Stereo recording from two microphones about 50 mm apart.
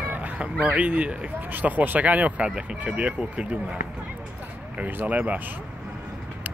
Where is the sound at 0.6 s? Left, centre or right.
Right.